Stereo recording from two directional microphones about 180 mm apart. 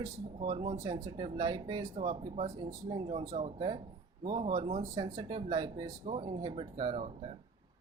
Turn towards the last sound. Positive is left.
turn(degrees=-25)  # may be behind; listen again after turning